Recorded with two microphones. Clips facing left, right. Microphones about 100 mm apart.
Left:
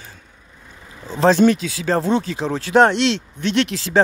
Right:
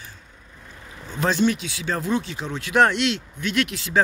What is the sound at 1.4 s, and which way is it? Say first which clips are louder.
Speech: left 6 dB; 35° left (ahead or behind).